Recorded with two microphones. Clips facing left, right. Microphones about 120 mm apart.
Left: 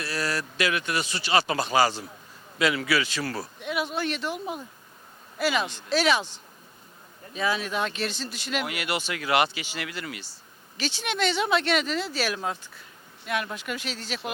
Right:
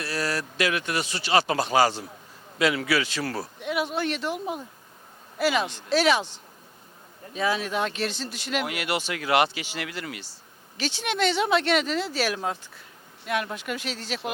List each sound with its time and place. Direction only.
0.0 s speech: 45° right (ahead or behind)
5.4 s speech: 50° right (ahead or behind)
7.3 s speech: 45° right (ahead or behind)
10.8 s speech: 55° right (ahead or behind)
13.2 s speech: 40° right (ahead or behind)